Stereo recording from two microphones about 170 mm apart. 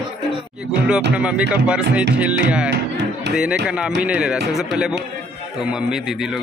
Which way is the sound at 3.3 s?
5° right (ahead or behind).